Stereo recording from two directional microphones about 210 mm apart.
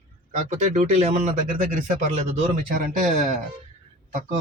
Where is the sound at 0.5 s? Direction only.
30° right (ahead or behind).